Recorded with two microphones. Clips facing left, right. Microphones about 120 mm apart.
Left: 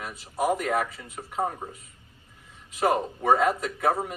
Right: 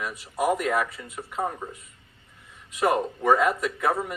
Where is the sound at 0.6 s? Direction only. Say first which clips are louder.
Right 1 dB; 50° left (ahead or behind).